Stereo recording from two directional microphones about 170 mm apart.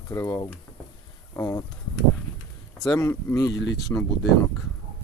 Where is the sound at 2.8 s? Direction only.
20° left (ahead or behind).